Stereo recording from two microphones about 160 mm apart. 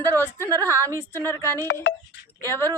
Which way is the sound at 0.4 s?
20° right (ahead or behind).